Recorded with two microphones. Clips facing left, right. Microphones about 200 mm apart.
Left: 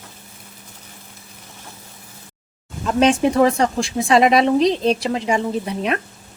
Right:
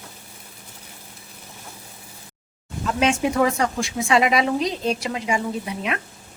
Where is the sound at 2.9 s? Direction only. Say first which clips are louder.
Left 5 dB; 35° left (ahead or behind).